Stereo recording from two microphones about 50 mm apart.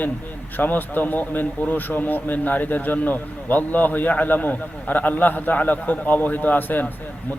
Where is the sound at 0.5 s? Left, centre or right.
Left.